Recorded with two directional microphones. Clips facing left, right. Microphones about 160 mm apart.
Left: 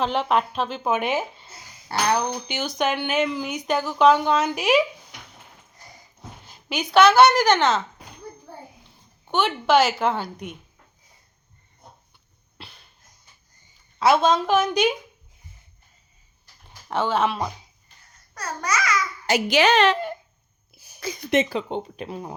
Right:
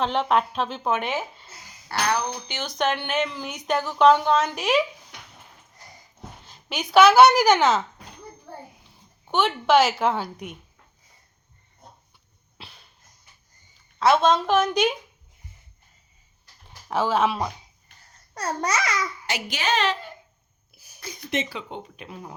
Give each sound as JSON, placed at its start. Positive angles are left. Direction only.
{"t": 0.0, "sound": "speech", "side_deg": 5}
{"t": 2.5, "sound": "speech", "side_deg": 5}
{"t": 6.7, "sound": "a woman's voice", "side_deg": -5}
{"t": 9.2, "sound": "speech", "side_deg": 0}
{"t": 12.5, "sound": "a sound", "side_deg": 0}
{"t": 14.0, "sound": "speech", "side_deg": 5}
{"t": 16.9, "sound": "speech", "side_deg": 0}
{"t": 18.3, "sound": "speech", "side_deg": -30}
{"t": 19.5, "sound": "a woman's voice", "side_deg": 70}
{"t": 20.7, "sound": "a sound", "side_deg": 20}
{"t": 21.2, "sound": "a woman's voice", "side_deg": 55}
{"t": 21.7, "sound": "speech", "side_deg": 35}